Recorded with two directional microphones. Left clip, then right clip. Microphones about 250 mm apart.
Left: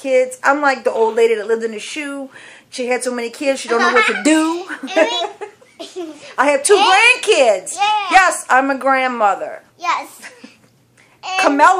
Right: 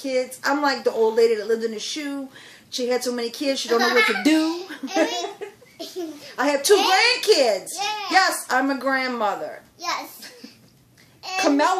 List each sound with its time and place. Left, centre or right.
0.0 s a woman's voice: centre
11.2 s a woman's voice: centre